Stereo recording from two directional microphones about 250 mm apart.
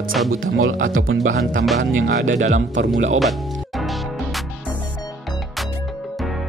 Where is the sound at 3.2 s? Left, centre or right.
Centre.